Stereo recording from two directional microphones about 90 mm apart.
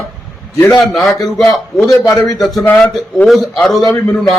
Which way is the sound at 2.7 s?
15° left (ahead or behind).